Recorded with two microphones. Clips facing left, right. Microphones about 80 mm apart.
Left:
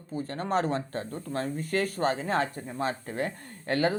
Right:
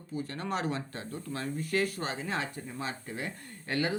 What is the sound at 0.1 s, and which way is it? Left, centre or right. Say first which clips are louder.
Speech: left 5 dB; left.